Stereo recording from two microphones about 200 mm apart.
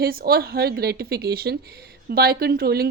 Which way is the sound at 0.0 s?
50° right (ahead or behind).